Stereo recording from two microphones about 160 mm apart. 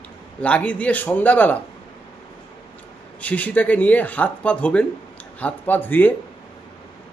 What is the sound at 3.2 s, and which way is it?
Speech, 10° left (ahead or behind).